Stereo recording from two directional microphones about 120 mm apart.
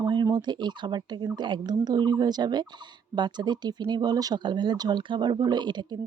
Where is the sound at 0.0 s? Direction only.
40° right (ahead or behind).